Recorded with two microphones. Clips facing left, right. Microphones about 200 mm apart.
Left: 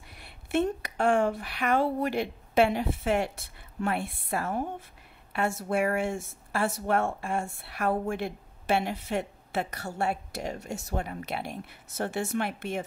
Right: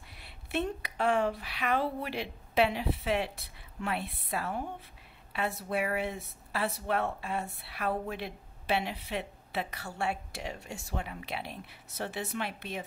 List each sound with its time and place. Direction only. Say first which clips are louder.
0.2 s speech: left 6 dB; 50° left (ahead or behind)